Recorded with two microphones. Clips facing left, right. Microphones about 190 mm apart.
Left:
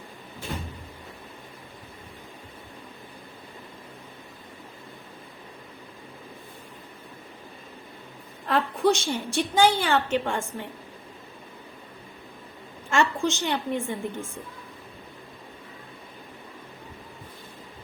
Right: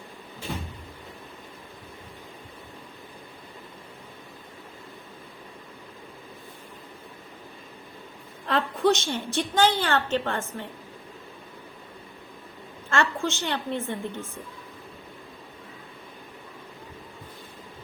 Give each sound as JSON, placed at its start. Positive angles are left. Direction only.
{"t": 8.4, "sound": "a woman's voice", "side_deg": 5}
{"t": 12.9, "sound": "a woman's voice", "side_deg": 15}